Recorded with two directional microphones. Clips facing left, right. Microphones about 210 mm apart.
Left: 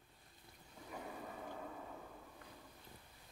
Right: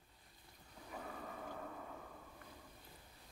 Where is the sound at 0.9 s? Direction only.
5° left (ahead or behind).